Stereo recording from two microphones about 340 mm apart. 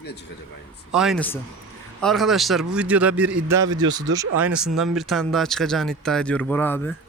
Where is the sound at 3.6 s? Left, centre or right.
Right.